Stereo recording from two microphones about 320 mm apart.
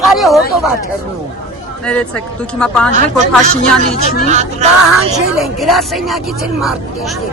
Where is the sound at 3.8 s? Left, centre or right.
Right.